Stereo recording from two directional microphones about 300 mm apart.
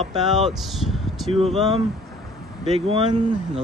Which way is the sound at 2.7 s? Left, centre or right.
Centre.